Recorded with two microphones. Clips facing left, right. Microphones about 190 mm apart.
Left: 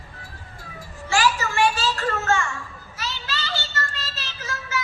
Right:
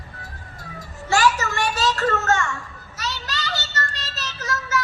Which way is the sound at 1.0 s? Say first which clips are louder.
Right 2 dB; 40° right (ahead or behind).